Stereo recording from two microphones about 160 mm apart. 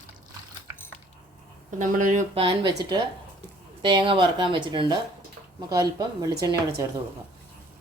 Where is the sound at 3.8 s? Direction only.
30° right (ahead or behind).